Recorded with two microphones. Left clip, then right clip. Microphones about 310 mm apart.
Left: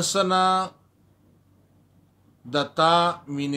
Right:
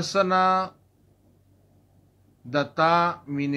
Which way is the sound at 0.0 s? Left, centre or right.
Left.